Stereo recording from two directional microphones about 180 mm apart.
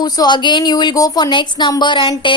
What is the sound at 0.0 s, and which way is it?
A woman's voice, 25° left (ahead or behind).